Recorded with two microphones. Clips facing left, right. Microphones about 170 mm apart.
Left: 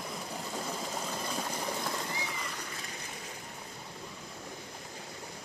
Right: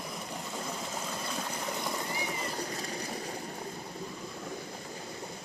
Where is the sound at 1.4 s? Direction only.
5° left (ahead or behind).